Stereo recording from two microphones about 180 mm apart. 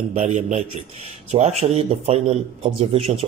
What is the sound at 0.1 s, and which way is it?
Speech, 35° right (ahead or behind).